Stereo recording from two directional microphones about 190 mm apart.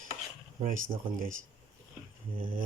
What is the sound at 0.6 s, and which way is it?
Speech, 45° right (ahead or behind).